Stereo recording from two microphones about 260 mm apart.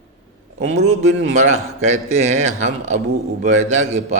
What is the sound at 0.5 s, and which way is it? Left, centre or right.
Speech, right.